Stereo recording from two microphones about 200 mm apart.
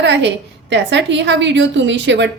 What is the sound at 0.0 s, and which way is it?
A woman's voice, 60° right (ahead or behind).